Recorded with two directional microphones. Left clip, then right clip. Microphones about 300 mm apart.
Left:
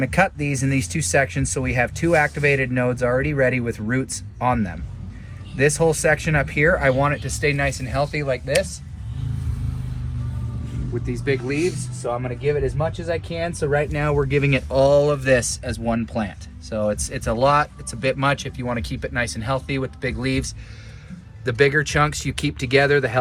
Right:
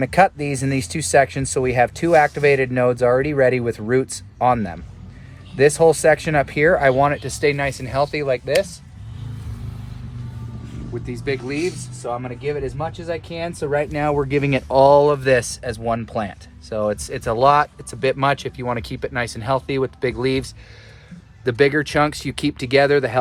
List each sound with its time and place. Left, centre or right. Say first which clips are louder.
0.0 s speech: right 4 dB; right
10.9 s speech: left 1 dB; centre